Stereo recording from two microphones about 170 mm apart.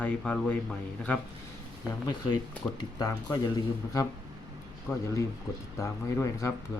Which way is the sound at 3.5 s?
20° left (ahead or behind).